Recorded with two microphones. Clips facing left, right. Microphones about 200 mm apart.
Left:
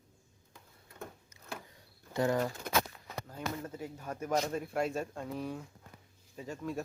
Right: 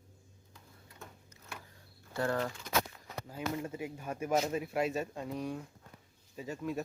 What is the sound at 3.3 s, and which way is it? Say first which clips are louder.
Speech: right 3 dB; 10° right (ahead or behind).